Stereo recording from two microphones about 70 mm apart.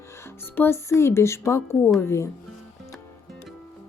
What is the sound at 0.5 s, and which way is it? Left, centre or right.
Speech, left.